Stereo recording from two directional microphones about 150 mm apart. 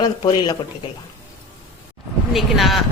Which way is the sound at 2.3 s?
Centre (ahead or behind).